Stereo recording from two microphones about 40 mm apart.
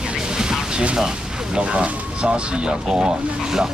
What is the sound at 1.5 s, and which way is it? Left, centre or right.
Speech, right.